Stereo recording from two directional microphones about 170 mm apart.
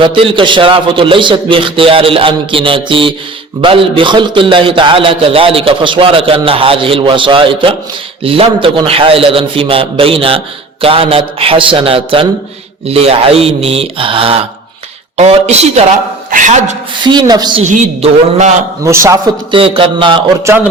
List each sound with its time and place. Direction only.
0.0 s a man's voice: 30° right (ahead or behind); by 16.7 s 45° right (ahead or behind)
17.0 s speech: 25° right (ahead or behind)
17.7 s speech: 45° right (ahead or behind)
18.9 s a man's voice: 15° right (ahead or behind)
19.5 s a man's voice: 30° right (ahead or behind)